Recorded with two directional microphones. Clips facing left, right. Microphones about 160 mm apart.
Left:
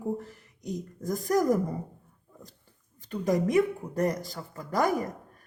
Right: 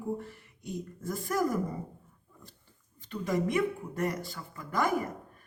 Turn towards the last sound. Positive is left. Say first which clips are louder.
# left 4 dB
turn(degrees=40)  # may be behind; listen again after turning